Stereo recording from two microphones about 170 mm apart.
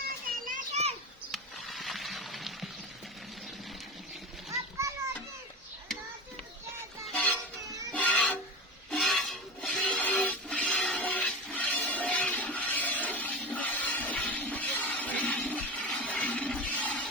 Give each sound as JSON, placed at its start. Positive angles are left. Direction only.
{"t": 0.4, "sound": "children playing", "side_deg": -45}
{"t": 1.3, "sound": "a sound", "side_deg": 0}
{"t": 7.1, "sound": "music", "side_deg": 10}